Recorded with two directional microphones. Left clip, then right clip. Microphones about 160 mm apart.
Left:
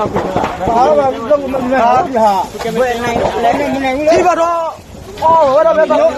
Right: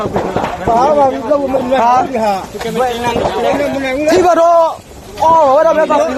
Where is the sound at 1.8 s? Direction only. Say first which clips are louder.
Even; 90° right.